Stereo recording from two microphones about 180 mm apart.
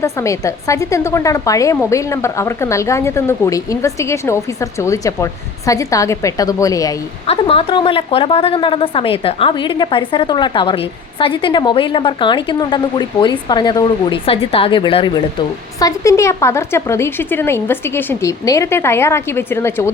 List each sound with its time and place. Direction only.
0.0 s speech: 15° left (ahead or behind)
7.3 s a woman's voice: 30° left (ahead or behind)
15.8 s speech: 15° left (ahead or behind)